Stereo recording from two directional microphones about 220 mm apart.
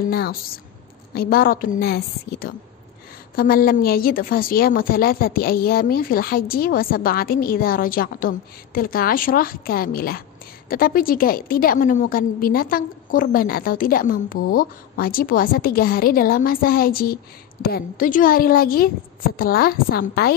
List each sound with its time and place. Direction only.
0.1 s a woman's voice: 45° left (ahead or behind)